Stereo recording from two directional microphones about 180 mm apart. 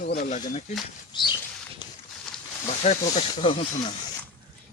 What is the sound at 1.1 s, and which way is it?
Speech, 25° left (ahead or behind).